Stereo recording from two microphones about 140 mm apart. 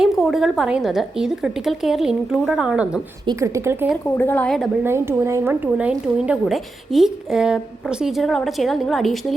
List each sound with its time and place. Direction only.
0.0 s speech: centre (ahead or behind)
3.2 s a woman's voice: 20° right (ahead or behind)
4.0 s a woman's voice: 15° left (ahead or behind)
4.4 s speech: centre (ahead or behind)
4.8 s speech: 20° right (ahead or behind); by 9.2 s centre (ahead or behind)